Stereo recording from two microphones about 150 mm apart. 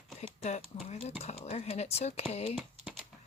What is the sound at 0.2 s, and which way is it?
Speech, 50° left (ahead or behind).